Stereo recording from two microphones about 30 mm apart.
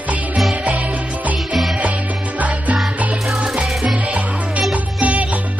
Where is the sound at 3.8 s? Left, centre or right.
Right.